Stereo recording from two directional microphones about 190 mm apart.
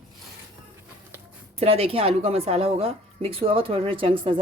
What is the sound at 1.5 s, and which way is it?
A woman's voice, 30° right (ahead or behind).